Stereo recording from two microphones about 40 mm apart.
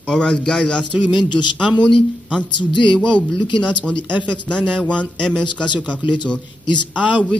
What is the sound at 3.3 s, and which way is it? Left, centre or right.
A man's voice, centre.